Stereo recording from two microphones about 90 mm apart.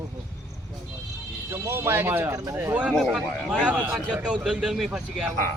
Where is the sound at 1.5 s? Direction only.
25° right (ahead or behind).